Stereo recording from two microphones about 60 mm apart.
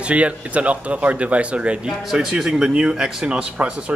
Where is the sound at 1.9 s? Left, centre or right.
Centre.